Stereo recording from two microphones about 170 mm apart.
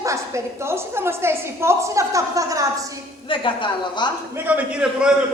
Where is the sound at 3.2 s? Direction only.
30° left (ahead or behind).